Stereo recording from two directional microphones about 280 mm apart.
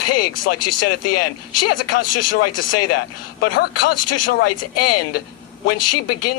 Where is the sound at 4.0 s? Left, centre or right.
Left.